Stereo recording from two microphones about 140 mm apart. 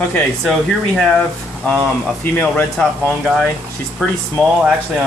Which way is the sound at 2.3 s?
10° left (ahead or behind).